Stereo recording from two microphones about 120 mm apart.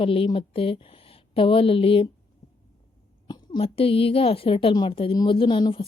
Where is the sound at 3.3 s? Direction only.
35° left (ahead or behind).